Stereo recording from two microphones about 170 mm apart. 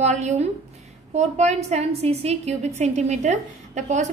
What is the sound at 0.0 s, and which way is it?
A woman's voice, 45° right (ahead or behind).